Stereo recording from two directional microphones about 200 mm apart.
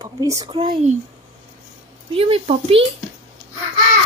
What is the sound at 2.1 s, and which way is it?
Speech, 30° right (ahead or behind).